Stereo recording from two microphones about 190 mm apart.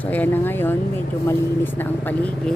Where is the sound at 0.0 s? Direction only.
10° left (ahead or behind).